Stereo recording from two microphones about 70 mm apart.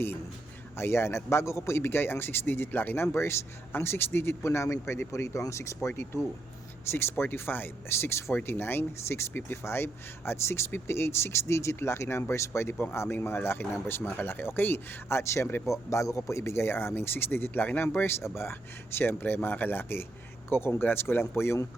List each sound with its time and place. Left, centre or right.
0.8 s speech: left
6.9 s a man's voice: left
16.3 s speech: left